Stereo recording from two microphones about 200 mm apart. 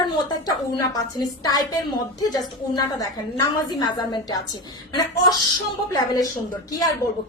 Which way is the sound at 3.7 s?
20° left (ahead or behind).